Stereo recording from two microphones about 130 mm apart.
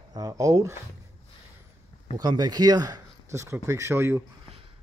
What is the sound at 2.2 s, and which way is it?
Speech, 30° right (ahead or behind).